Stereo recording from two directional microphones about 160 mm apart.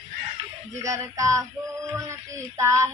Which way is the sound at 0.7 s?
20° right (ahead or behind).